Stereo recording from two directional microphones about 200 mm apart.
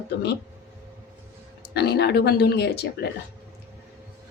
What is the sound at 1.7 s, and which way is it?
Speech, 55° left (ahead or behind).